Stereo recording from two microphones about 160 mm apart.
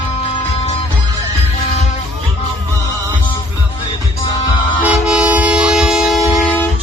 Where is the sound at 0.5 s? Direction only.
40° left (ahead or behind).